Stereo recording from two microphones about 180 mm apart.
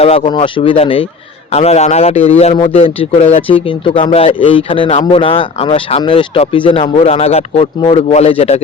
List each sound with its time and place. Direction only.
0.0 s a man's voice: 35° left (ahead or behind)